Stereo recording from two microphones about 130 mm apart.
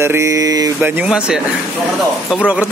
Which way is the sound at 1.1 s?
5° right (ahead or behind).